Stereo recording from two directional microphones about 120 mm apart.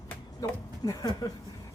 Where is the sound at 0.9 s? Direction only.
30° left (ahead or behind).